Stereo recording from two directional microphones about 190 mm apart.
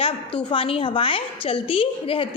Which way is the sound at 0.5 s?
30° left (ahead or behind).